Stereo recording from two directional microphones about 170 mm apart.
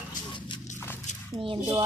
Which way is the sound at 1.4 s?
30° right (ahead or behind).